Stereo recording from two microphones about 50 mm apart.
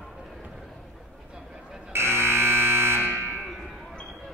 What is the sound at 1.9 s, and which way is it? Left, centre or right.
Fire alarm, right.